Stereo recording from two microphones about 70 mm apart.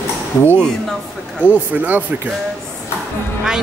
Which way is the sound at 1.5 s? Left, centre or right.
Right.